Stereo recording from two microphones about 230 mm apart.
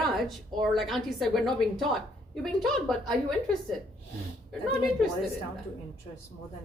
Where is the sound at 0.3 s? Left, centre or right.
Centre.